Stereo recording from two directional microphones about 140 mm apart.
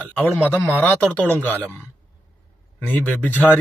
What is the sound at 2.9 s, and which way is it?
Speech, 10° left (ahead or behind).